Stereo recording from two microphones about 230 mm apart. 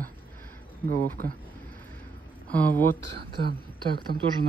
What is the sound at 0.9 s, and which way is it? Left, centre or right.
Speech, right.